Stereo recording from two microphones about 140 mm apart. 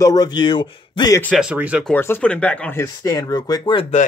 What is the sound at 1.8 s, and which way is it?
Speech, 15° left (ahead or behind).